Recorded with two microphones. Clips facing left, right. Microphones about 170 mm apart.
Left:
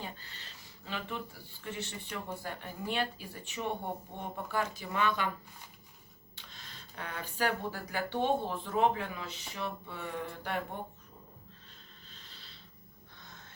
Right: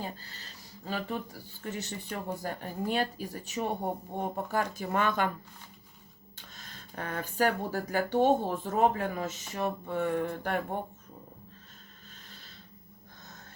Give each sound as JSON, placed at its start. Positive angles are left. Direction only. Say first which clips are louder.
{"t": 0.0, "sound": "a sound", "louder": "right 5 dB", "side_deg": -40}
{"t": 0.9, "sound": "speech", "louder": "right 5 dB", "side_deg": -40}
{"t": 6.3, "sound": "speech", "louder": "right 2 dB", "side_deg": -45}
{"t": 12.1, "sound": "snort", "louder": "right 3 dB", "side_deg": -50}